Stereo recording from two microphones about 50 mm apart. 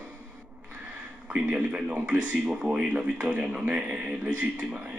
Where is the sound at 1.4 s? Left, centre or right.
Right.